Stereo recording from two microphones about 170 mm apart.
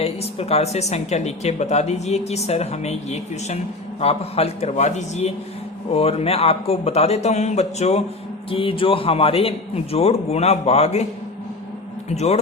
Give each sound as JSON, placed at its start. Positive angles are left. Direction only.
{"t": 0.0, "sound": "speech", "side_deg": 35}
{"t": 12.0, "sound": "speech", "side_deg": 40}